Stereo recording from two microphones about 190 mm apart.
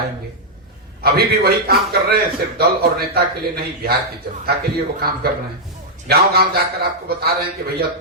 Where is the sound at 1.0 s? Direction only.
55° right (ahead or behind).